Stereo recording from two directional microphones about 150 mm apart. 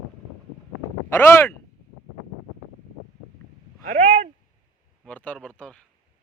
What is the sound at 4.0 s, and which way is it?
Speech, 40° right (ahead or behind).